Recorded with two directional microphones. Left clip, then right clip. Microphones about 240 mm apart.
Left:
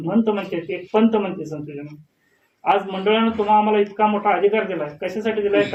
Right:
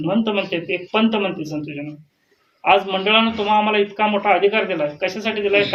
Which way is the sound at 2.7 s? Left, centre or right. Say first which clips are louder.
Right 3 dB; right.